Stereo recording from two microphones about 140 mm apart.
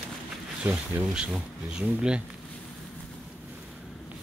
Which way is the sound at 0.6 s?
10° right (ahead or behind).